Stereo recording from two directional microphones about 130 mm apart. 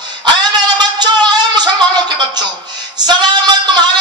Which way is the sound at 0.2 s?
35° right (ahead or behind).